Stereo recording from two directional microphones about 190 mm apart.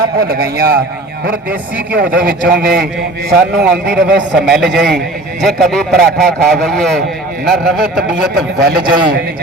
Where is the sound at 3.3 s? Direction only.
5° right (ahead or behind).